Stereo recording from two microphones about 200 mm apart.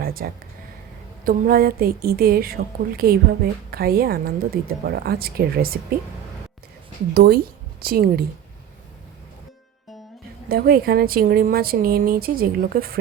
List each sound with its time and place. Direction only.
0.0 s a sound: 45° right (ahead or behind)
1.2 s a woman's voice: 45° right (ahead or behind)
7.1 s a woman's voice: 50° right (ahead or behind)
10.5 s a woman's voice: 50° right (ahead or behind)